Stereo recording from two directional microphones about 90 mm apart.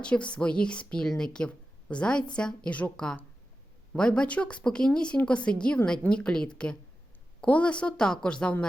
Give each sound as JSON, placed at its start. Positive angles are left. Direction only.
{"t": 0.0, "sound": "speech", "side_deg": 10}